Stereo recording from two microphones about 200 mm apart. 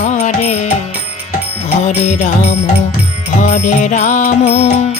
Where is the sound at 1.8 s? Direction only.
35° left (ahead or behind).